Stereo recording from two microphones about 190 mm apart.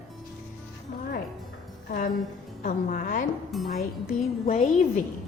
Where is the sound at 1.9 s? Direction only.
45° left (ahead or behind).